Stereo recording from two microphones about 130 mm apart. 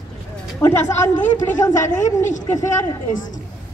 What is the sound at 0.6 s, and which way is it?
A woman's voice, 25° left (ahead or behind).